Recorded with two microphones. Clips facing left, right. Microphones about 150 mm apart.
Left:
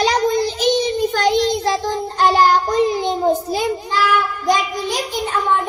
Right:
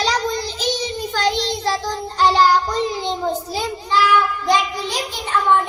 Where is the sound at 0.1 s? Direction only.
55° left (ahead or behind).